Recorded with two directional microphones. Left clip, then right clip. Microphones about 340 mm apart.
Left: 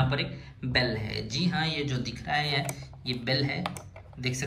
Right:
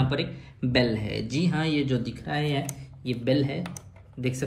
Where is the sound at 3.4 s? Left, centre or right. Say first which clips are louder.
Even; centre.